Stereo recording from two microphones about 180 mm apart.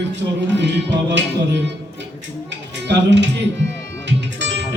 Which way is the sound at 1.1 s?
75° right (ahead or behind).